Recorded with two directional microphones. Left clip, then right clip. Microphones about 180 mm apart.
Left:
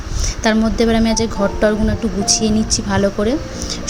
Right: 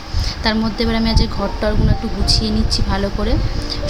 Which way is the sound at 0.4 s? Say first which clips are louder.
Left 4 dB; 15° left (ahead or behind).